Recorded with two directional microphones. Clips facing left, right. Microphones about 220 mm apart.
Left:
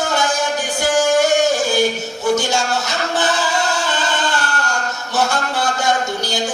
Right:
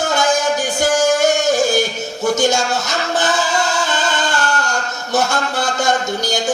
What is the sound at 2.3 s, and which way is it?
Speech, 45° right (ahead or behind).